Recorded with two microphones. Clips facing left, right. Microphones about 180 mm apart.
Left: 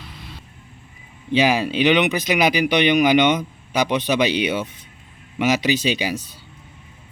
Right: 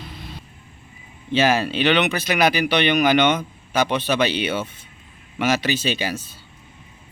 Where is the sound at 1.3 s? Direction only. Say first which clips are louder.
Left 1 dB; 15° left (ahead or behind).